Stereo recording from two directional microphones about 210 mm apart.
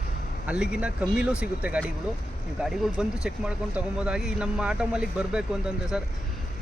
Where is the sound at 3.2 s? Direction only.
5° right (ahead or behind).